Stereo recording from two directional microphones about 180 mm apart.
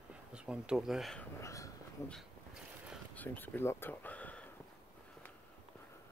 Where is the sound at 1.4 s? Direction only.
15° left (ahead or behind).